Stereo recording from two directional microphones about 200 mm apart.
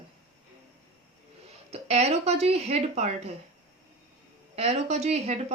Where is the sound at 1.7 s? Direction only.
30° right (ahead or behind).